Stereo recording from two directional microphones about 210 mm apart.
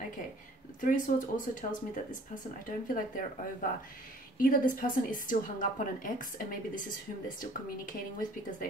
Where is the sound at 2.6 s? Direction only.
40° left (ahead or behind).